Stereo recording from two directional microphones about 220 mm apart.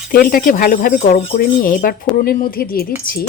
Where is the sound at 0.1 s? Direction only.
40° left (ahead or behind).